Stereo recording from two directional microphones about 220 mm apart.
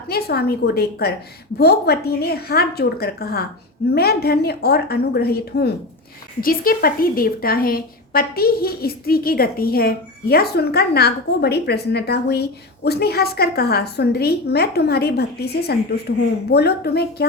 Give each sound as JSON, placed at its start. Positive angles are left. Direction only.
{"t": 0.1, "sound": "a woman's voice", "side_deg": 45}